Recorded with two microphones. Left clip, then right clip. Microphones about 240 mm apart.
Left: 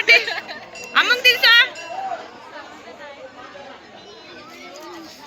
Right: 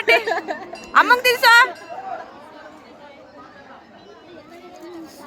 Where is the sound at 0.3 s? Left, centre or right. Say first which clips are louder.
Right 4 dB; right.